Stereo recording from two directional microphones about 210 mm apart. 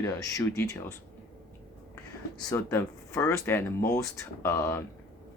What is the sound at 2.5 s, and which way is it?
Speech, 10° left (ahead or behind).